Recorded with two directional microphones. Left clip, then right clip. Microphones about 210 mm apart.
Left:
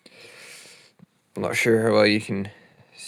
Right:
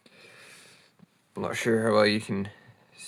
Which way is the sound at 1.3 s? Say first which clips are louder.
Left 6 dB; 35° left (ahead or behind).